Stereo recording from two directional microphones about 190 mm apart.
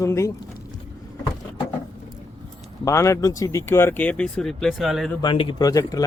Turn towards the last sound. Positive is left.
turn(degrees=20)  # may be behind; listen again after turning